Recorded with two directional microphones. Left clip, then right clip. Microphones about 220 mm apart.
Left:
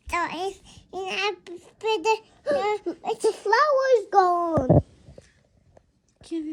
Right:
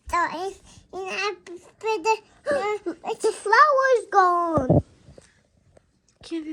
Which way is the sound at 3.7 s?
50° left (ahead or behind).